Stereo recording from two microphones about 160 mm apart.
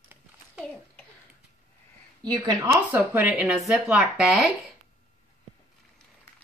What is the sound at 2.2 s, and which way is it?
Speech, 25° right (ahead or behind).